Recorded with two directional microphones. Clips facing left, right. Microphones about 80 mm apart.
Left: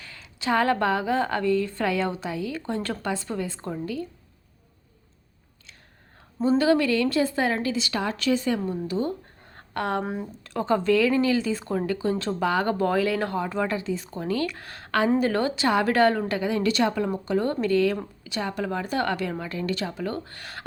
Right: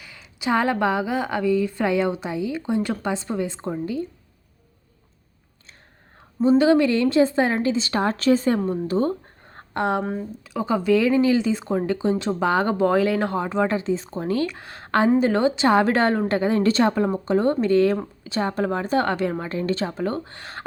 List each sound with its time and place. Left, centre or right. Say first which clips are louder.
0.0 s speech: right 2 dB; centre
6.6 s a woman's voice: right 3 dB; right
9.6 s a sound: right 4 dB; right
10.0 s speech: right 3 dB; centre
10.4 s speech: even; centre
10.9 s a woman's voice: right 5 dB; right